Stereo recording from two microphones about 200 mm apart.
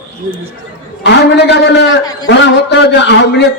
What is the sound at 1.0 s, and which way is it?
A man's voice, 60° left (ahead or behind).